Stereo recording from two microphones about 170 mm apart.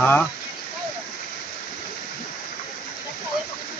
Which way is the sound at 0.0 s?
10° left (ahead or behind).